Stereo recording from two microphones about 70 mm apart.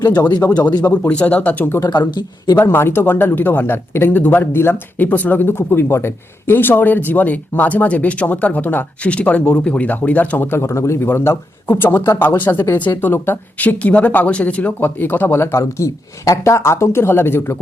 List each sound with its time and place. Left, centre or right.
0.5 s speech: left
1.9 s speech: left
2.6 s speech: left
10.6 s speech: left
15.5 s speech: left